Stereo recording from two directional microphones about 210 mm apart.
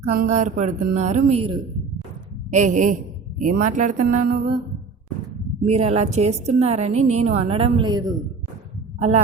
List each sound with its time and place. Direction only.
0.2 s a man's voice: 35° right (ahead or behind)
5.6 s a man's voice: 30° right (ahead or behind)
9.0 s a man's voice: 30° right (ahead or behind)